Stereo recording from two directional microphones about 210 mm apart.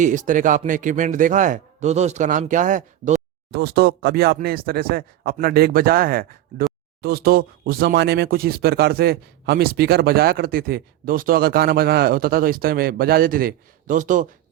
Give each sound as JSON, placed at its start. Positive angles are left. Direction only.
{"t": 0.0, "sound": "speech", "side_deg": -35}
{"t": 3.5, "sound": "speech", "side_deg": -50}